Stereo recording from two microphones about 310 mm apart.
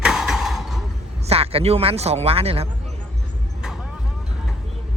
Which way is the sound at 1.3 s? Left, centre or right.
Centre.